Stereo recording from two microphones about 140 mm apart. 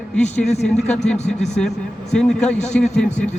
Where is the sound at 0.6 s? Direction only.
5° left (ahead or behind).